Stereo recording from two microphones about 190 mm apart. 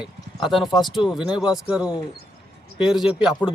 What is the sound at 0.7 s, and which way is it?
Speech, 25° left (ahead or behind).